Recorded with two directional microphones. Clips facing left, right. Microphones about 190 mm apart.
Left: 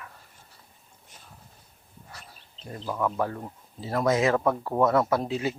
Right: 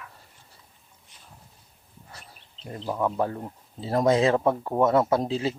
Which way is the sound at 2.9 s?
25° right (ahead or behind).